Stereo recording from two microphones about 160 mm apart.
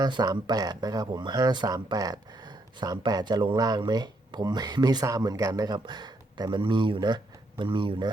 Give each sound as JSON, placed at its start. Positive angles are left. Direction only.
{"t": 0.0, "sound": "speech", "side_deg": -25}